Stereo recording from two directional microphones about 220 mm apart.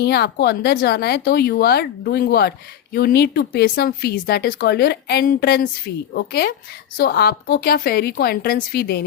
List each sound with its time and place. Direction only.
0.0 s speech: 50° left (ahead or behind)